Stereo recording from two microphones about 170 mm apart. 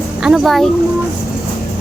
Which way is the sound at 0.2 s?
5° right (ahead or behind).